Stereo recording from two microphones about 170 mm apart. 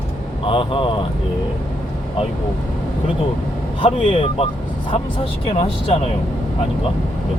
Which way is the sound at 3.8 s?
35° left (ahead or behind).